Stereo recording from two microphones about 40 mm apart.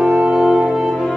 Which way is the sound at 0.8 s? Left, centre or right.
Centre.